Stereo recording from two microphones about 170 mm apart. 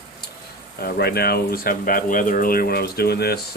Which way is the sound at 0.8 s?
70° left (ahead or behind).